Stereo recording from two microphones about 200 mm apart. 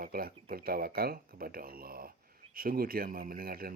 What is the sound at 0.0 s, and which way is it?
Speech, 45° right (ahead or behind).